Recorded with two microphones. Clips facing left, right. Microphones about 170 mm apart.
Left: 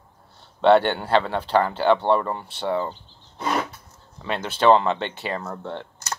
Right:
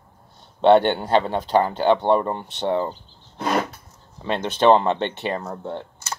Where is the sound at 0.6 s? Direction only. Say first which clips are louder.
Right 2 dB; 15° right (ahead or behind).